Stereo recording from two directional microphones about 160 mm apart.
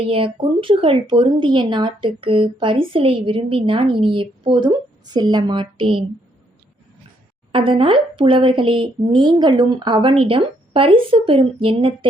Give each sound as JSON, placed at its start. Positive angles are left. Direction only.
{"t": 0.1, "sound": "a woman's voice", "side_deg": -35}
{"t": 7.5, "sound": "speech", "side_deg": -35}